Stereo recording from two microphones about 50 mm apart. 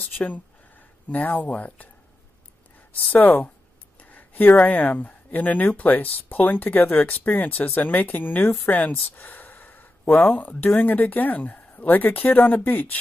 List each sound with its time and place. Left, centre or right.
0.0 s speech: left
3.0 s speech: left
4.0 s a sound: left
4.6 s speech: left